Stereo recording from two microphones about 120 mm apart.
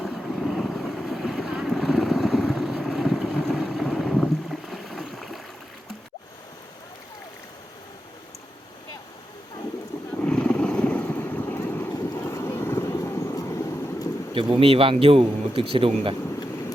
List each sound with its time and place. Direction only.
0.0 s boat: centre (ahead or behind)
10.2 s vehicle: 10° left (ahead or behind); by 14.1 s 25° left (ahead or behind)
14.3 s speech: 50° right (ahead or behind)